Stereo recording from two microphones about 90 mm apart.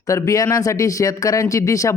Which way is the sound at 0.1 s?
35° left (ahead or behind).